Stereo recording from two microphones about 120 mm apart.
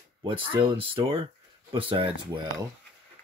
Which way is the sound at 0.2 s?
45° right (ahead or behind).